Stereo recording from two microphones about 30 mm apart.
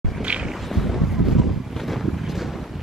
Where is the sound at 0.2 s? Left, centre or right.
Right.